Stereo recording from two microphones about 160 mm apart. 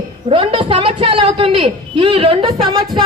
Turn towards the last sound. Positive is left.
turn(degrees=-25)  # may be behind; listen again after turning